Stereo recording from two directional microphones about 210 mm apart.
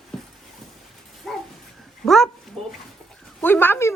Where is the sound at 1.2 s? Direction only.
Centre (ahead or behind).